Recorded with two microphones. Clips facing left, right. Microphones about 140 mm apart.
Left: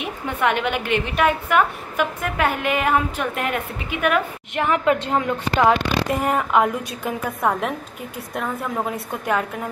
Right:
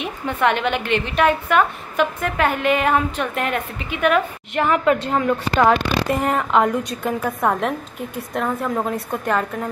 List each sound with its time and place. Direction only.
0.0 s a woman's voice: 10° left (ahead or behind)
4.9 s a woman's voice: 20° left (ahead or behind)
5.7 s a woman's voice: 5° left (ahead or behind)